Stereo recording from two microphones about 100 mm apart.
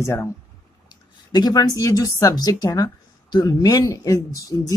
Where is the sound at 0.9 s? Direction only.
45° left (ahead or behind).